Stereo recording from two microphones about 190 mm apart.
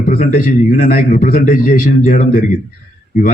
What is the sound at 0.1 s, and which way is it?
Speech, 50° left (ahead or behind).